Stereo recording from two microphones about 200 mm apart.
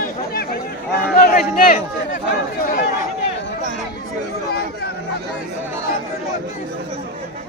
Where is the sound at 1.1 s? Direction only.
45° left (ahead or behind).